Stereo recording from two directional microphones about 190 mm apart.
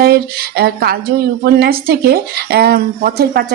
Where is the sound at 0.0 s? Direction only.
55° right (ahead or behind).